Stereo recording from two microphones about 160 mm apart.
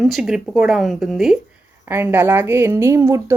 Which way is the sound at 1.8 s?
10° right (ahead or behind).